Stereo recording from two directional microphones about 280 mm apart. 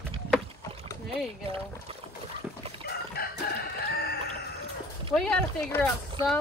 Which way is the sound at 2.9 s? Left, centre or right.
Left.